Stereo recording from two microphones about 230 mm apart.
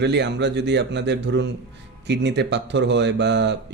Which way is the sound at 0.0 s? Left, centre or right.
Right.